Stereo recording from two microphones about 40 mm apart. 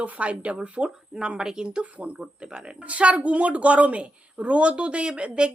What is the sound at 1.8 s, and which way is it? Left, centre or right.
A woman's voice, right.